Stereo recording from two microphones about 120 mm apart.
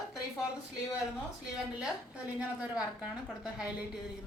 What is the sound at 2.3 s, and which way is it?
Speech, 10° right (ahead or behind).